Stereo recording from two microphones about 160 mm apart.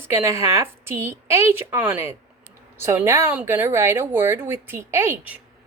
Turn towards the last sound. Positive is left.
turn(degrees=-15)  # may be behind; listen again after turning